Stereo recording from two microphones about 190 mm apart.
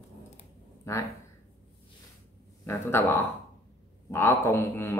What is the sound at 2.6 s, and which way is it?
Speech, 15° left (ahead or behind).